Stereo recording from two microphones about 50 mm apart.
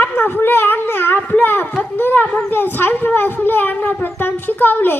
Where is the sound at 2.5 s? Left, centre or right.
Left.